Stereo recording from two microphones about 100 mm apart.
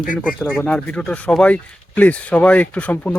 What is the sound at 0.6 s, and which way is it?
Speech, 10° left (ahead or behind).